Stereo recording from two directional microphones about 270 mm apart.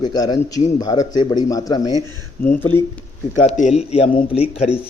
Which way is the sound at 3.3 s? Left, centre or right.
Left.